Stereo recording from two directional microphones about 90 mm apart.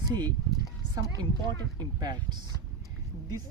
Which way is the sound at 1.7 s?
50° right (ahead or behind).